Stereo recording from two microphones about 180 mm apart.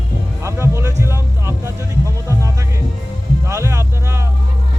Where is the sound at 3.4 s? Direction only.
15° right (ahead or behind).